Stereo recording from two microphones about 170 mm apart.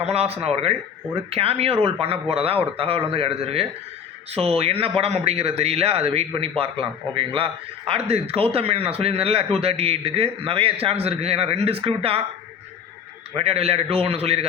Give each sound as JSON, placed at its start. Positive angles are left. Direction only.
{"t": 0.0, "sound": "a man's voice", "side_deg": -35}
{"t": 13.3, "sound": "a man's voice", "side_deg": -35}